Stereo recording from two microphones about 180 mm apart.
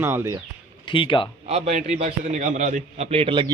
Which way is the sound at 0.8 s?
30° left (ahead or behind).